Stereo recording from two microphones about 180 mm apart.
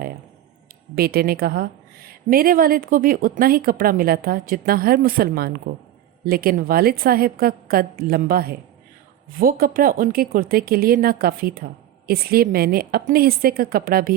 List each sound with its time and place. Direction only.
0.9 s a woman's voice: 60° right (ahead or behind)